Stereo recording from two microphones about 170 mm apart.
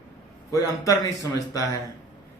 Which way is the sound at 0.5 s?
20° left (ahead or behind).